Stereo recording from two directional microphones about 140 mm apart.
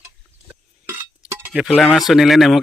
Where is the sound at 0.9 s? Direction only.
15° right (ahead or behind).